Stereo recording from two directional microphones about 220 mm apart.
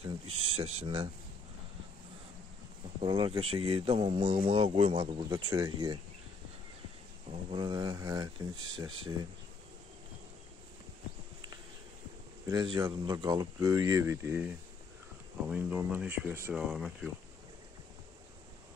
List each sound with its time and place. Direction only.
0.6 s a man's voice: 30° right (ahead or behind)
3.0 s a man's voice: 25° right (ahead or behind)
7.2 s a man's voice: 20° right (ahead or behind)
12.4 s speech: 20° right (ahead or behind); by 17.1 s 5° right (ahead or behind)